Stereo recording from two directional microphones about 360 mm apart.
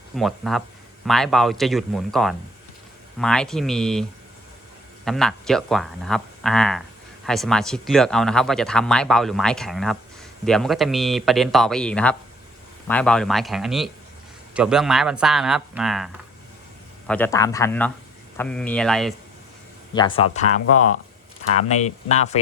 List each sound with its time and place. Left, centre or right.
0.2 s speech: centre
5.0 s speech: centre
19.9 s speech: centre
20.5 s speech: left
22.1 s speech: centre